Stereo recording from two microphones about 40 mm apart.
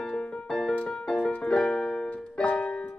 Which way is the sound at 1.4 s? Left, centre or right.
Left.